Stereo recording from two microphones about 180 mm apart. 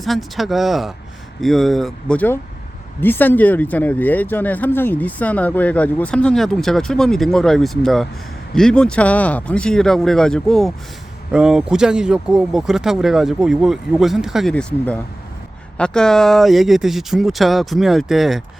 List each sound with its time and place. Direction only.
0.0 s speech: centre (ahead or behind)